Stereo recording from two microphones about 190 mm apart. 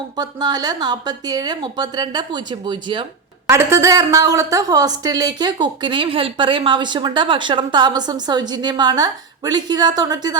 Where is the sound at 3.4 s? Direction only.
15° right (ahead or behind).